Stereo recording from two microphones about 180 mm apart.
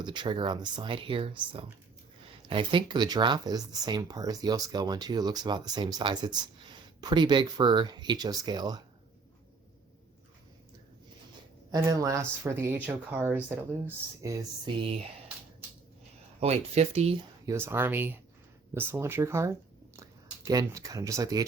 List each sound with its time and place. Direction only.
0.0 s speech: 25° right (ahead or behind)
11.7 s speech: 20° right (ahead or behind)
16.4 s speech: 35° right (ahead or behind)
17.4 s speech: 15° right (ahead or behind)